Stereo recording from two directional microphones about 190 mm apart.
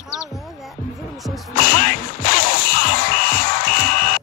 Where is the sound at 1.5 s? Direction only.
50° left (ahead or behind).